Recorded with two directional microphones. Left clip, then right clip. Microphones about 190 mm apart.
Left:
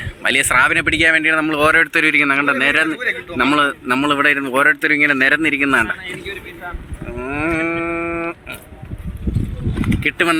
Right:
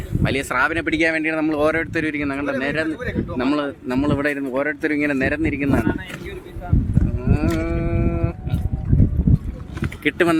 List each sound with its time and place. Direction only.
0.2 s a man's voice: 10° right (ahead or behind)
4.8 s speech: 15° right (ahead or behind)
7.3 s livestock: 10° left (ahead or behind)
10.0 s speech: 20° right (ahead or behind)